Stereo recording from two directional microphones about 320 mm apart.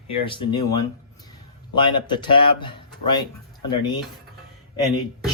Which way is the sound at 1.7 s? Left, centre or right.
Centre.